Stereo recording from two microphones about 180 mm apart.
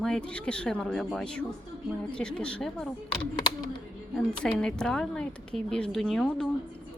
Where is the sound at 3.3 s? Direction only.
25° left (ahead or behind).